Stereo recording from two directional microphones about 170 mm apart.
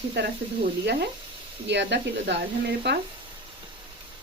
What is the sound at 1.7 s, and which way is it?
Speech, 90° right.